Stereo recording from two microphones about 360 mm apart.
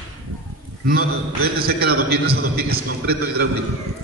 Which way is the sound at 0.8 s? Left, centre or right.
Right.